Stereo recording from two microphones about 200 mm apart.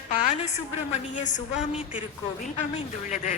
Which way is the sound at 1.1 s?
40° left (ahead or behind).